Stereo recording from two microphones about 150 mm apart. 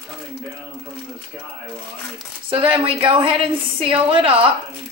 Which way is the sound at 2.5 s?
35° right (ahead or behind).